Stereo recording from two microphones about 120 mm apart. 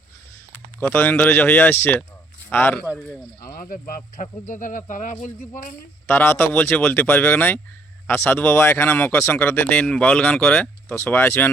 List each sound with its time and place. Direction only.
0.8 s speech: 15° left (ahead or behind)
4.2 s speech: 90° left
6.1 s speech: 20° left (ahead or behind)
10.8 s speech: 20° left (ahead or behind)